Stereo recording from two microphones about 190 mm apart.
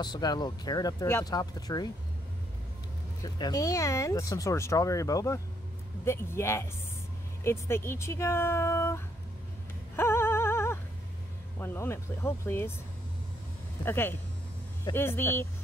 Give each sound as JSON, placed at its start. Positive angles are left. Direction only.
{"t": 0.0, "sound": "speech", "side_deg": 20}
{"t": 3.2, "sound": "speech", "side_deg": 20}
{"t": 9.9, "sound": "music", "side_deg": 15}
{"t": 11.6, "sound": "speech", "side_deg": 10}
{"t": 13.8, "sound": "speech", "side_deg": 10}